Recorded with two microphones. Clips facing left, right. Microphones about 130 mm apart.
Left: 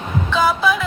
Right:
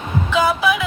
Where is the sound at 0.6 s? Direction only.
5° right (ahead or behind).